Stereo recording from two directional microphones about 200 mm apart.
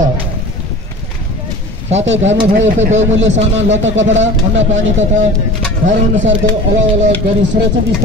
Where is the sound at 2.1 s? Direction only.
65° right (ahead or behind).